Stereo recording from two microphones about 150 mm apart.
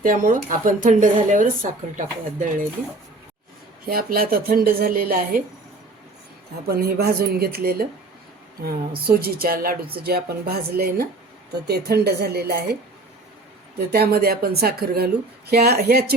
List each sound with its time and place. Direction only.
0.0 s speech: 65° right (ahead or behind)
3.8 s a woman's voice: 75° right (ahead or behind)
6.7 s a woman's voice: 90° right
9.0 s a woman's voice: 90° right
13.7 s a woman's voice: 90° right